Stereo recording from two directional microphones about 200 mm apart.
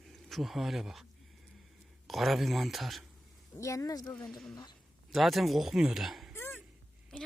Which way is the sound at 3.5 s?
15° left (ahead or behind).